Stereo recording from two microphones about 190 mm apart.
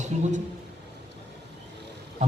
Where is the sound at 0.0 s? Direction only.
40° right (ahead or behind).